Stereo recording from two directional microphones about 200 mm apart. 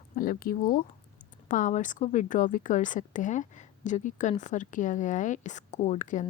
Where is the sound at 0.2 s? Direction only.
45° left (ahead or behind).